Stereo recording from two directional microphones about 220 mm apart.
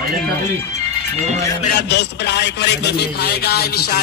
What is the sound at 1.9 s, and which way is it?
Speech, 50° left (ahead or behind).